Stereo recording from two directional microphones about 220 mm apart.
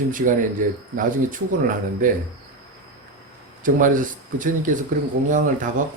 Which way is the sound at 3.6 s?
35° right (ahead or behind).